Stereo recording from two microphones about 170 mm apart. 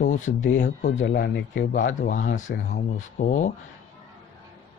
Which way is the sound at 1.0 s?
75° left (ahead or behind).